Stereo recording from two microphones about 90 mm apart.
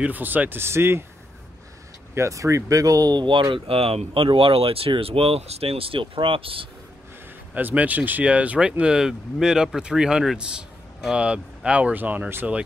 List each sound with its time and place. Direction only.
0.0 s speech: 20° right (ahead or behind)
2.1 s speech: 35° right (ahead or behind); by 3.4 s 60° right (ahead or behind)
3.5 s speech: 90° right
7.5 s speech: 15° right (ahead or behind)